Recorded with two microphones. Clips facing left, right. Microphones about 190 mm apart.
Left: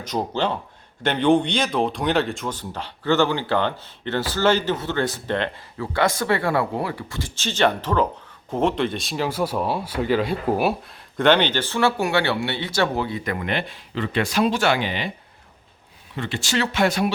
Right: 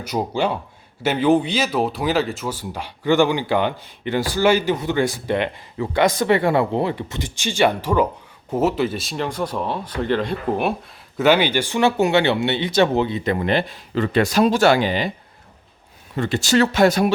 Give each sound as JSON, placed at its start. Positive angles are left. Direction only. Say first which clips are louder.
{"t": 0.0, "sound": "speech", "louder": "right 2 dB", "side_deg": -10}
{"t": 11.2, "sound": "speech", "louder": "right 2 dB", "side_deg": -10}
{"t": 16.1, "sound": "speech", "louder": "right 7 dB", "side_deg": -40}